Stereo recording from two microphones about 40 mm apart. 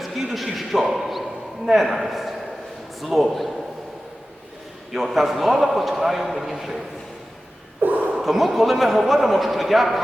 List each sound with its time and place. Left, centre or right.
0.0 s a man's voice: centre
4.9 s a man's voice: centre
7.8 s a sound: right
8.2 s a man's voice: centre